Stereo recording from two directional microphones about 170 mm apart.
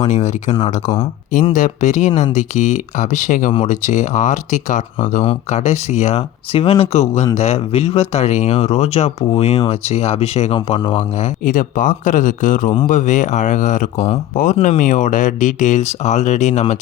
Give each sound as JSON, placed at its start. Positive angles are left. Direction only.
{"t": 0.0, "sound": "speech", "side_deg": 45}
{"t": 1.5, "sound": "speech", "side_deg": 45}
{"t": 11.4, "sound": "speech", "side_deg": 50}